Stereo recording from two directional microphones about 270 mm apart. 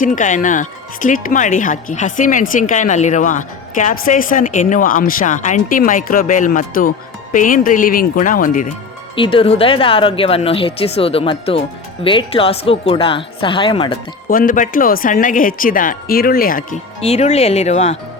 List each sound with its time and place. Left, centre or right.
0.0 s speech: left
9.1 s speech: centre
14.3 s speech: left